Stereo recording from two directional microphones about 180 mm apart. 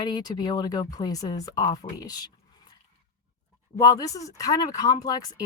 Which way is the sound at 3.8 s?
20° left (ahead or behind).